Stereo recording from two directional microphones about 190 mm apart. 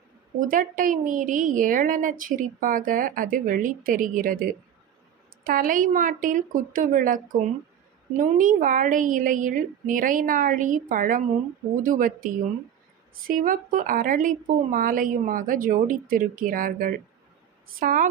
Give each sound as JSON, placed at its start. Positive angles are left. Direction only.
{"t": 0.5, "sound": "a woman's voice", "side_deg": -45}
{"t": 5.5, "sound": "a woman's voice", "side_deg": -45}
{"t": 8.2, "sound": "a woman's voice", "side_deg": -45}